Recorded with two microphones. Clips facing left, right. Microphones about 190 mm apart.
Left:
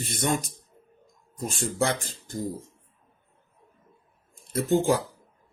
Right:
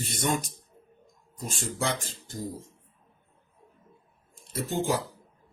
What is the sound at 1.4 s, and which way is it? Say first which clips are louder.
Speech: left 5 dB; 50° left (ahead or behind).